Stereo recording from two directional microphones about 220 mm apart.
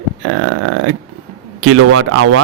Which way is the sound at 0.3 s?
90° right.